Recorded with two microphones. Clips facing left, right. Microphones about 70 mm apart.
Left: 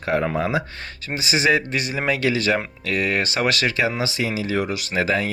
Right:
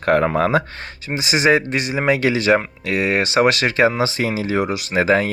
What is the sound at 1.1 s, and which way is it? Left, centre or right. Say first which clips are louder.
Speech: right 3 dB; right.